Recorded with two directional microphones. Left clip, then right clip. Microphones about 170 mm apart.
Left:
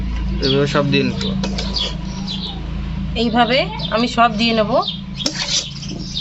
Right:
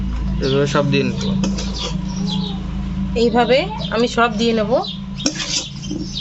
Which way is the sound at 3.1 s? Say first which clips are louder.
Right 1 dB; 40° right (ahead or behind).